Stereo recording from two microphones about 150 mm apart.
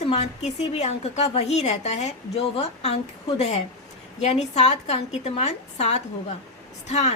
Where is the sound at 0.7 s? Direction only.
45° left (ahead or behind).